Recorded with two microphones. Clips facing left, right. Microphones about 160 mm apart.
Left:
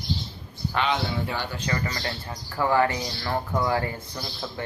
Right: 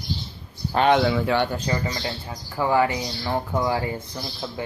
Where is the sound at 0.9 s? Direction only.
90° right.